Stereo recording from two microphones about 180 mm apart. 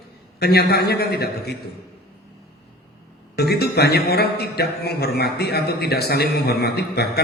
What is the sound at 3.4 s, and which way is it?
Speech, 60° left (ahead or behind).